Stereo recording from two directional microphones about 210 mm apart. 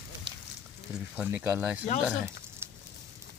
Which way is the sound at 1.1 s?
10° right (ahead or behind).